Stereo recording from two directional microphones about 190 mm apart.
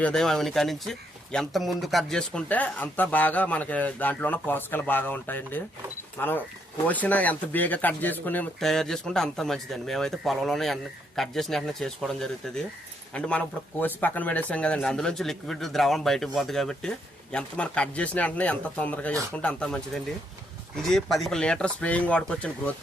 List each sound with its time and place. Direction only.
0.0 s speech: 5° left (ahead or behind)